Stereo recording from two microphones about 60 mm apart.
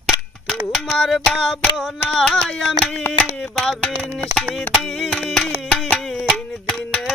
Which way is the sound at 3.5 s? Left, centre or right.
Centre.